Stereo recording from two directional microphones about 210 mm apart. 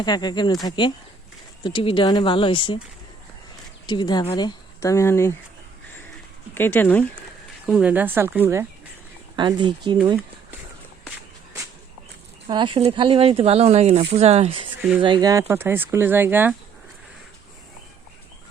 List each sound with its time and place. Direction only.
0.0 s speech: 20° left (ahead or behind)
3.8 s speech: 20° left (ahead or behind)
6.5 s speech: 10° left (ahead or behind)
7.7 s speech: 5° right (ahead or behind)
9.3 s speech: 20° right (ahead or behind)
12.5 s speech: 25° right (ahead or behind)